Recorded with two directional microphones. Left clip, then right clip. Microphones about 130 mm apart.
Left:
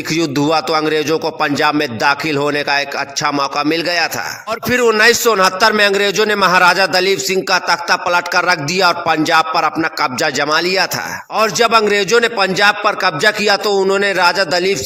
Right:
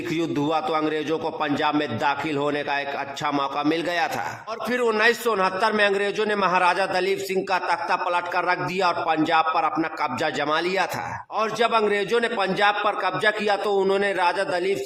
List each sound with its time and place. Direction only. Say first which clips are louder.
0.1 s a man's voice: left 9 dB; 35° left (ahead or behind)